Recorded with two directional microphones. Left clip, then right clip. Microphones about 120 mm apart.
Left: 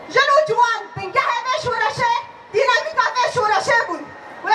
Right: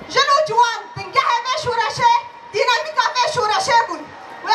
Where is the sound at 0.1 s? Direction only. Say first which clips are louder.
Even; 35° right (ahead or behind).